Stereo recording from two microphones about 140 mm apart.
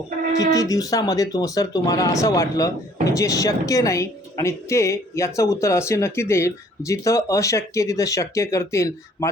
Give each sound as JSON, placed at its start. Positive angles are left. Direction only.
{"t": 0.3, "sound": "a woman's voice", "side_deg": 25}